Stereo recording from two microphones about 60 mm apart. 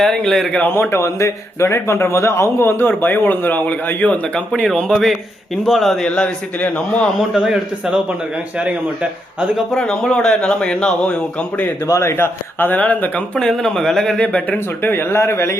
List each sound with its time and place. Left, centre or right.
0.0 s speech: centre
0.6 s a man's voice: left
4.7 s speech: centre
6.1 s a man's voice: centre
7.3 s a man's voice: centre
9.7 s speech: centre
11.9 s speech: left
13.5 s speech: centre
14.2 s speech: left
15.1 s a man's voice: left